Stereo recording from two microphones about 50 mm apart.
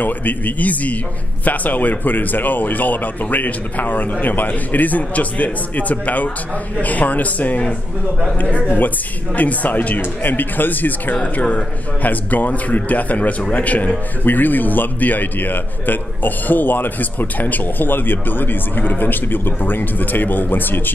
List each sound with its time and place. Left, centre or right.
0.0 s a man's voice: left